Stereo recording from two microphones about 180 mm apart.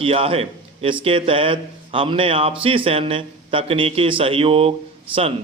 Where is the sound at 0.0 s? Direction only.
30° right (ahead or behind).